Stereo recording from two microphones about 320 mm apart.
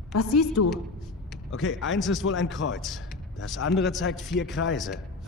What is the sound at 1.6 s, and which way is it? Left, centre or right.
Speech, left.